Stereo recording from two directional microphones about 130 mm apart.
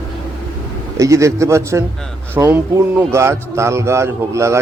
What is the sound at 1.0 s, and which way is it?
A man's voice, 25° right (ahead or behind).